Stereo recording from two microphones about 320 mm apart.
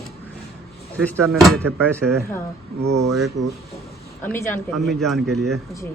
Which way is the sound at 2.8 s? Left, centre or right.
Right.